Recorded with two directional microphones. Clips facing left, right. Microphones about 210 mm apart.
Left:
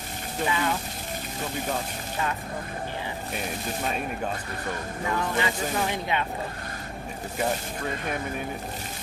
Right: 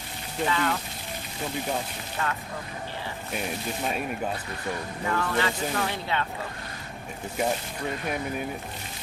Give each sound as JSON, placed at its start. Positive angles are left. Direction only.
{"t": 0.4, "sound": "speech", "side_deg": 15}
{"t": 5.1, "sound": "speech", "side_deg": 15}